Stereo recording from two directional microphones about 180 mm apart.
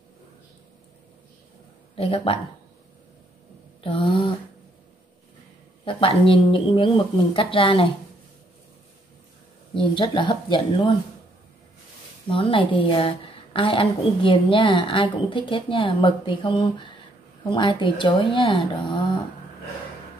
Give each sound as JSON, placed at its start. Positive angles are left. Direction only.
{"t": 2.0, "sound": "speech", "side_deg": 30}
{"t": 3.8, "sound": "a woman's voice", "side_deg": 30}
{"t": 5.9, "sound": "a woman's voice", "side_deg": 30}
{"t": 9.8, "sound": "a woman's voice", "side_deg": 30}
{"t": 12.3, "sound": "a woman's voice", "side_deg": 30}